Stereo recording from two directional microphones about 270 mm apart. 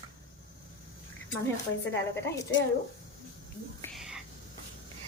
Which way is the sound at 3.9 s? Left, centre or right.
Centre.